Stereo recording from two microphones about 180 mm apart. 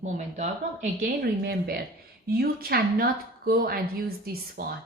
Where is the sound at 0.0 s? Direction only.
40° right (ahead or behind).